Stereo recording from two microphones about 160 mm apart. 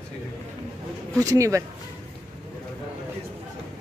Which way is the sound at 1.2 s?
20° right (ahead or behind).